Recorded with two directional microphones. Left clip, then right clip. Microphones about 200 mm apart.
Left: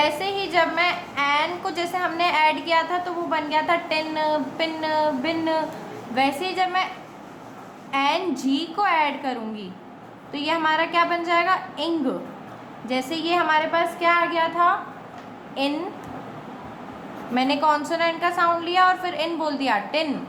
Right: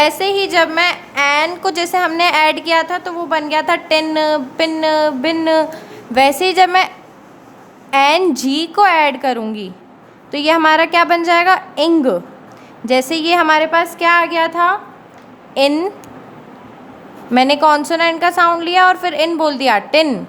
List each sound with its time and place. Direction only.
0.0 s a woman's voice: 60° right (ahead or behind)
17.3 s a woman's voice: 50° right (ahead or behind)